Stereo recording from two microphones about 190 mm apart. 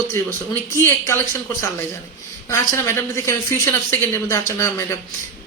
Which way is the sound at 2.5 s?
15° left (ahead or behind).